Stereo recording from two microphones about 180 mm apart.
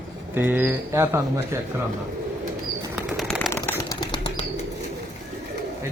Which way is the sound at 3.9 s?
25° left (ahead or behind).